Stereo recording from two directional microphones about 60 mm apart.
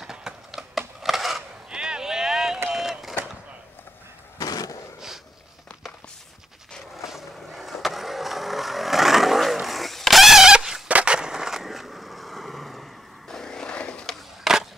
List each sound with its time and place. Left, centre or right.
0.0 s a sound: centre
2.7 s vehicle: centre
4.4 s a sound: left
7.1 s vehicle: centre
10.9 s skateboard: centre
13.3 s vehicle: centre
14.4 s skateboard: centre